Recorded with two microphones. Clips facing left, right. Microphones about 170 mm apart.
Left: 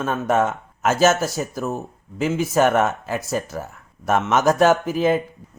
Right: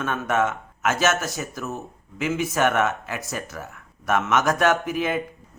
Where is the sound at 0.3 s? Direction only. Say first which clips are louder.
Left 3 dB; 35° left (ahead or behind).